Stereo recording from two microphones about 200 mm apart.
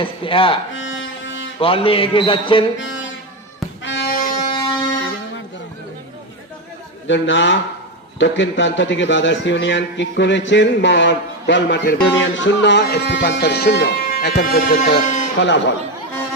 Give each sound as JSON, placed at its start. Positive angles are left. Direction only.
{"t": 0.0, "sound": "a man's voice", "side_deg": 25}
{"t": 0.7, "sound": "violin", "side_deg": 70}
{"t": 1.5, "sound": "a man's voice", "side_deg": 25}
{"t": 2.7, "sound": "music", "side_deg": 65}
{"t": 4.4, "sound": "a sound", "side_deg": 25}
{"t": 7.1, "sound": "a man's voice", "side_deg": 65}
{"t": 15.4, "sound": "a man's voice", "side_deg": 65}